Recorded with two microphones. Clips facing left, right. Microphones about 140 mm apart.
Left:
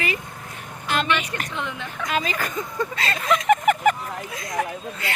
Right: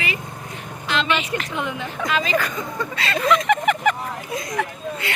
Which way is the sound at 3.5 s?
45° left (ahead or behind).